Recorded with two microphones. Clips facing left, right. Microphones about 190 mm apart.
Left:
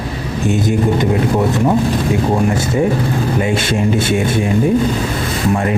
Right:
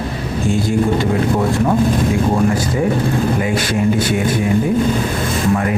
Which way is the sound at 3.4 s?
25° left (ahead or behind).